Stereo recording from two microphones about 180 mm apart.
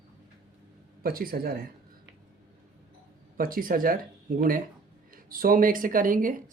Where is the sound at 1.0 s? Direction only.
55° right (ahead or behind).